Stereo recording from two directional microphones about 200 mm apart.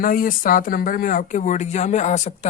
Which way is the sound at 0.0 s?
45° left (ahead or behind).